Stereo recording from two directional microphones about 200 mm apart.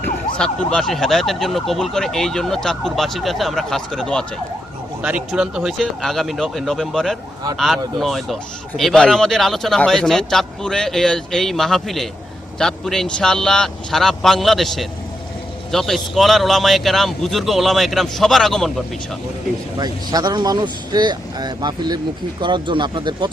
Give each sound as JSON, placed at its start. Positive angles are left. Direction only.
{"t": 0.3, "sound": "speech", "side_deg": 5}
{"t": 19.8, "sound": "speech", "side_deg": -20}